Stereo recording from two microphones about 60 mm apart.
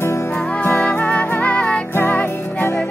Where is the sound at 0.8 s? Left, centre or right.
Left.